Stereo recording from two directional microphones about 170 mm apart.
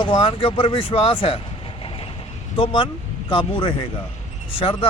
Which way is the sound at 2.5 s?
30° left (ahead or behind).